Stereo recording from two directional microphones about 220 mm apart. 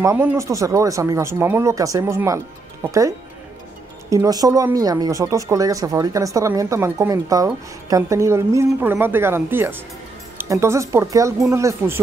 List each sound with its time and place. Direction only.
0.0 s speech: 10° right (ahead or behind)
4.1 s speech: 15° right (ahead or behind)